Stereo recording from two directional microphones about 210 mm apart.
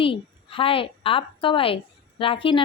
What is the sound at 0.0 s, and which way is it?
A woman's voice, 25° left (ahead or behind).